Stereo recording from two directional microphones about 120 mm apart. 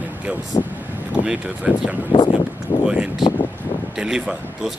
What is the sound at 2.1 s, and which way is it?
Speech, 40° left (ahead or behind).